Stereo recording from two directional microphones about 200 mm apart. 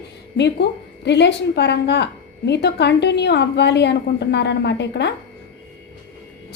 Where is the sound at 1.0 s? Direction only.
60° left (ahead or behind).